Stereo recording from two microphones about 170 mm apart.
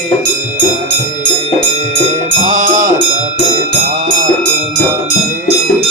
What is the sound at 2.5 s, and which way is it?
Music, 50° right (ahead or behind).